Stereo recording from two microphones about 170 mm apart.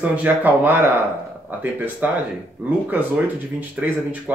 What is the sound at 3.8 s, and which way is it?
Speech, 5° right (ahead or behind).